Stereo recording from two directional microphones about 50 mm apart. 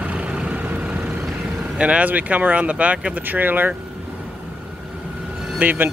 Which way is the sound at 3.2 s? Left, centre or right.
Right.